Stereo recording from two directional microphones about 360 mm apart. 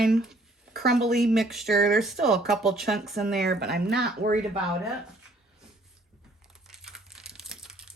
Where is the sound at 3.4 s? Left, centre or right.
Right.